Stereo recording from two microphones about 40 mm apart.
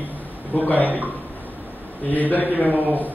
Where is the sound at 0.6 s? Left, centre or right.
Left.